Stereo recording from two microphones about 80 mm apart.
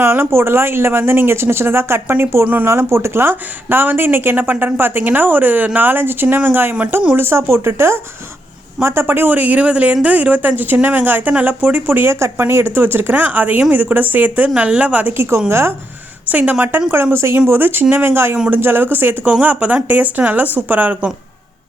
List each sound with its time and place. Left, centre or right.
0.0 s speech: right
16.2 s speech: centre